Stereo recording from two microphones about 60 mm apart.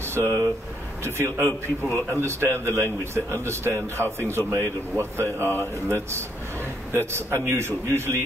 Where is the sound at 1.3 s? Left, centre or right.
Right.